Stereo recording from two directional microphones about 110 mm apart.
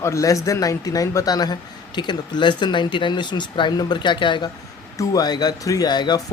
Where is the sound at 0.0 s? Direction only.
30° left (ahead or behind).